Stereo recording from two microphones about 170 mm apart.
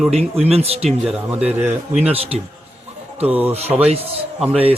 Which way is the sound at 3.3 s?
10° right (ahead or behind).